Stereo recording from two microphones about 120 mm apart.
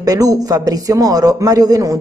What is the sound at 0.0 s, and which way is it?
A woman's voice, 30° right (ahead or behind).